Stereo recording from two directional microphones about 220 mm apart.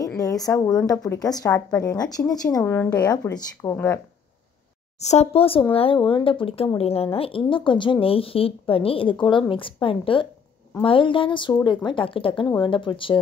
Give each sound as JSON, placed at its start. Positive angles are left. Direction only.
{"t": 0.2, "sound": "speech", "side_deg": 15}
{"t": 5.0, "sound": "speech", "side_deg": 30}